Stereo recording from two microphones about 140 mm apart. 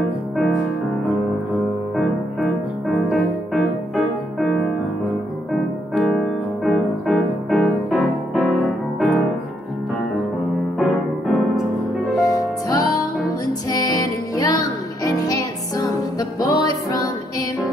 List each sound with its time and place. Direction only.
3.1 s music: centre (ahead or behind)
5.9 s music: 5° left (ahead or behind)
8.4 s piano: centre (ahead or behind)
10.8 s music: centre (ahead or behind)
12.2 s music: 25° left (ahead or behind)